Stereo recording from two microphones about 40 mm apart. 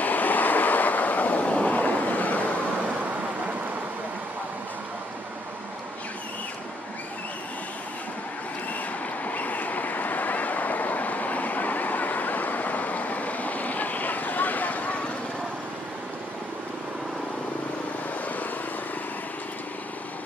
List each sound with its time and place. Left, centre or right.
0.0 s waves: left
9.2 s vehicle: left